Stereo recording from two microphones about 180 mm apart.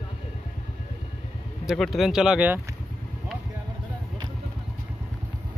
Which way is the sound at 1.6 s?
Centre (ahead or behind).